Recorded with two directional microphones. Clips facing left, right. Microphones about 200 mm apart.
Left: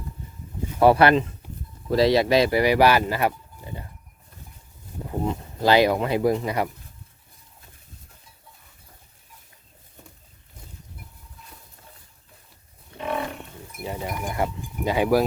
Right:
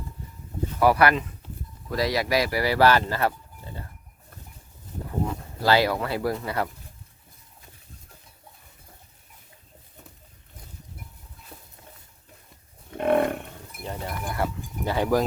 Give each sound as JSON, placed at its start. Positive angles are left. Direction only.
{"t": 0.8, "sound": "speech", "side_deg": 25}
{"t": 5.0, "sound": "speech", "side_deg": 20}
{"t": 13.0, "sound": "livestock", "side_deg": -55}
{"t": 13.8, "sound": "speech", "side_deg": 10}